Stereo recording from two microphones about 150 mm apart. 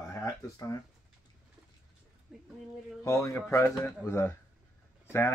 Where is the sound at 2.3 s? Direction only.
5° right (ahead or behind).